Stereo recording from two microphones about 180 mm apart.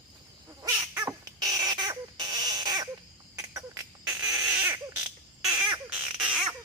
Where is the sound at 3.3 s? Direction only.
20° right (ahead or behind).